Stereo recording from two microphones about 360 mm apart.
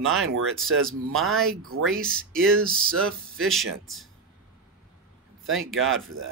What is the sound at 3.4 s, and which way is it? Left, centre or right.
Speech, right.